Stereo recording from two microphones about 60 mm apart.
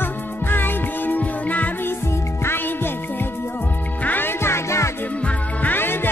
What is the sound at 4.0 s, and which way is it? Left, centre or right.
Music, left.